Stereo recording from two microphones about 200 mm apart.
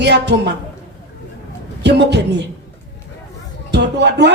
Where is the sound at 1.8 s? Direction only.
55° right (ahead or behind).